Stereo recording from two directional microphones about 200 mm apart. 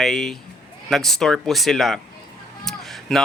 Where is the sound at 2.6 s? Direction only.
Centre (ahead or behind).